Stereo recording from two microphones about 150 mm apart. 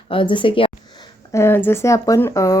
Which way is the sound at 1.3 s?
15° left (ahead or behind).